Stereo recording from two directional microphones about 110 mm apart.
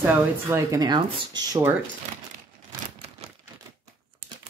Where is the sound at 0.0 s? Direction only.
20° right (ahead or behind); by 1.6 s 40° right (ahead or behind).